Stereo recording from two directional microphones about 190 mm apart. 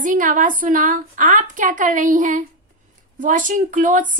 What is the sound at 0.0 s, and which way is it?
A woman's voice, 45° right (ahead or behind).